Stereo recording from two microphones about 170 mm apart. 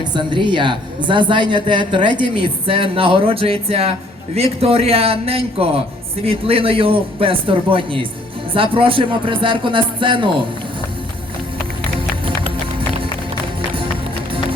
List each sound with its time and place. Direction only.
0.0 s a woman's voice: 25° right (ahead or behind)